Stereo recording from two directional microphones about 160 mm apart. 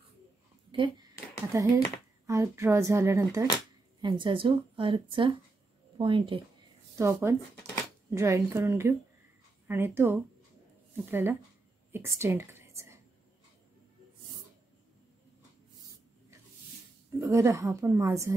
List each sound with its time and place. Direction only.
0.7 s a sound: 30° right (ahead or behind)
1.5 s a woman's voice: 20° right (ahead or behind)
4.0 s a woman's voice: 30° right (ahead or behind)
7.0 s a woman's voice: 15° right (ahead or behind)
11.9 s a sound: 15° right (ahead or behind)
17.2 s a woman's voice: 15° right (ahead or behind)